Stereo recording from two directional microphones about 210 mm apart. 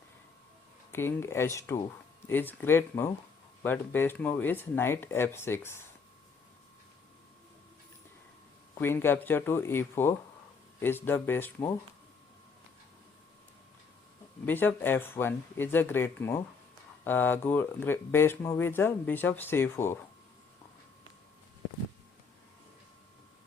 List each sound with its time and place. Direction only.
0.9 s speech: 10° left (ahead or behind)
8.8 s speech: 10° left (ahead or behind)
14.4 s speech: 10° left (ahead or behind)